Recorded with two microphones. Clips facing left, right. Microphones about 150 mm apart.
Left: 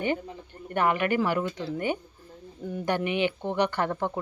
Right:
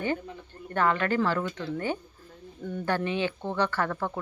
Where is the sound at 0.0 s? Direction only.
20° left (ahead or behind).